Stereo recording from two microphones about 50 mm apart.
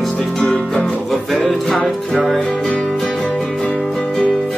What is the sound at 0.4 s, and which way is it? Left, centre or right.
Music, centre.